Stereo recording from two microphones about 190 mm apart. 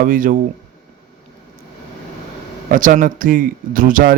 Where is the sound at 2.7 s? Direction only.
45° right (ahead or behind).